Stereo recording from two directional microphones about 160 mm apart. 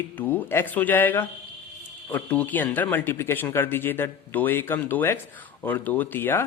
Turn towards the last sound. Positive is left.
turn(degrees=15)  # may be behind; listen again after turning